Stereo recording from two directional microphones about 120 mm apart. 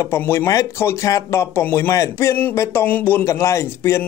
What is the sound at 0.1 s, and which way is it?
Speech, 20° left (ahead or behind).